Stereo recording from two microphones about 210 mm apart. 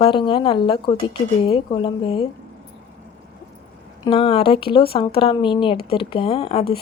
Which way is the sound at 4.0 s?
25° left (ahead or behind).